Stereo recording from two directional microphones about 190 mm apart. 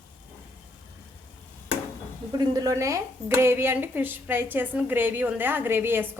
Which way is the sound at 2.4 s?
20° right (ahead or behind).